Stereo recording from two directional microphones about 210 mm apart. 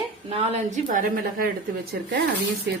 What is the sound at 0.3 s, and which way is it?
A woman's voice, 30° right (ahead or behind).